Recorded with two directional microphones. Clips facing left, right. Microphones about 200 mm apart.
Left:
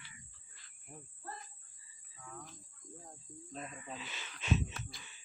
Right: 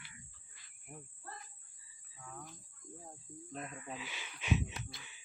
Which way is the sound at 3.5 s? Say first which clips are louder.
Right 1 dB; 10° right (ahead or behind).